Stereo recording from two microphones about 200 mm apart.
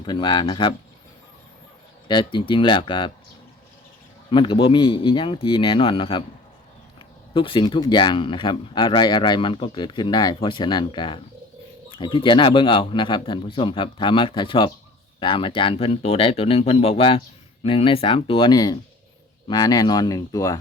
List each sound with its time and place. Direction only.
0.0 s speech: 20° left (ahead or behind)
2.0 s speech: 25° left (ahead or behind)
4.3 s speech: 25° left (ahead or behind)
7.3 s speech: 25° left (ahead or behind)